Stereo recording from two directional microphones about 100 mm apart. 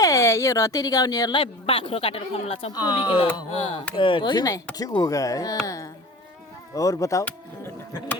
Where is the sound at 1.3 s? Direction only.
65° left (ahead or behind).